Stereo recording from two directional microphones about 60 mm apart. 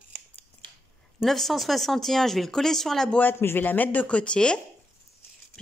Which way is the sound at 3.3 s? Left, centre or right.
Left.